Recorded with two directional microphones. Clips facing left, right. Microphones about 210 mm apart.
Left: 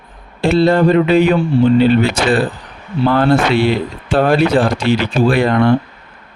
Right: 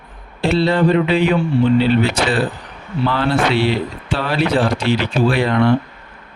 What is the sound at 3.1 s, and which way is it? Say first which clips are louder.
Speech: left 5 dB; 50° left (ahead or behind).